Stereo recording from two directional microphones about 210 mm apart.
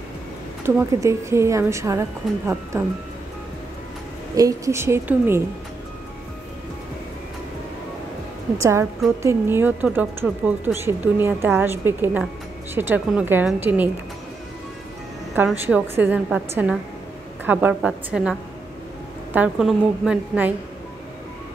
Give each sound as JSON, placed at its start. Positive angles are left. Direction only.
{"t": 0.7, "sound": "speech", "side_deg": -10}
{"t": 4.4, "sound": "speech", "side_deg": -15}
{"t": 8.5, "sound": "speech", "side_deg": -15}
{"t": 15.3, "sound": "a woman's voice", "side_deg": -10}